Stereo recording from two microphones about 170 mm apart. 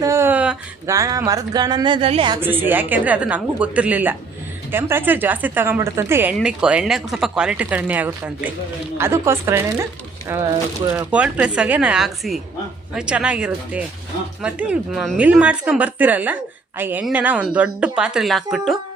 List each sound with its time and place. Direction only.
0.0 s a sound: 15° right (ahead or behind)
0.9 s a woman's voice: 20° right (ahead or behind)
2.4 s a woman's voice: 10° right (ahead or behind)